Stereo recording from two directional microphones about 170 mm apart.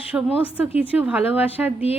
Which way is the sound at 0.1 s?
10° right (ahead or behind).